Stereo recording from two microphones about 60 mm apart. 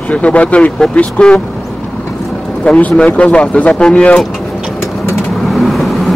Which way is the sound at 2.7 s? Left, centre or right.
Left.